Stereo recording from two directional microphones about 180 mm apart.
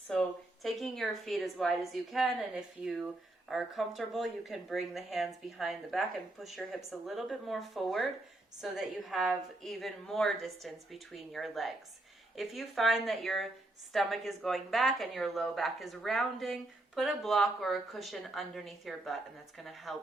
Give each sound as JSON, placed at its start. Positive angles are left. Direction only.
{"t": 0.1, "sound": "speech", "side_deg": 0}